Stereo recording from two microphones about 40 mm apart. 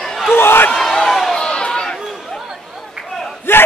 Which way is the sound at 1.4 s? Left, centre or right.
Left.